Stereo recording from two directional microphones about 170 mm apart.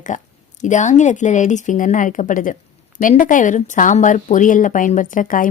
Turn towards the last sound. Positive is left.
turn(degrees=50)  # may be behind; listen again after turning